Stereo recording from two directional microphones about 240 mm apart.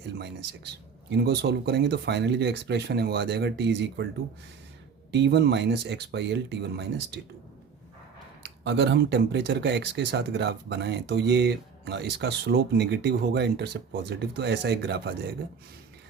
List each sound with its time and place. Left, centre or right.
1.1 s speech: right
5.1 s speech: right
8.6 s speech: right